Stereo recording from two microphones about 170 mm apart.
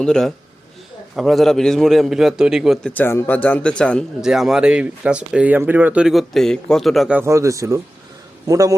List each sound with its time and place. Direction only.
0.0 s a man's voice: 5° left (ahead or behind)
2.9 s a man's voice: 15° left (ahead or behind)
7.2 s a man's voice: 15° right (ahead or behind)